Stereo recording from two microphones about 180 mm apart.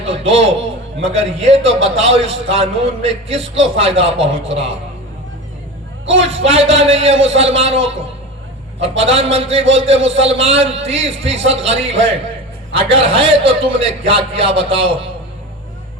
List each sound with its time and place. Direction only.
0.1 s a man's voice: 35° right (ahead or behind)
6.1 s a man's voice: 35° right (ahead or behind)